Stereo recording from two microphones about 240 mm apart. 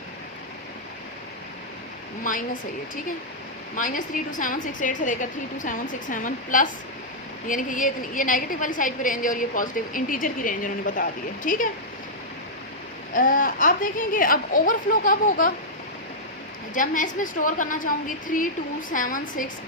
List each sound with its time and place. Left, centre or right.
2.2 s a woman's voice: left
13.1 s a woman's voice: left
16.7 s a woman's voice: left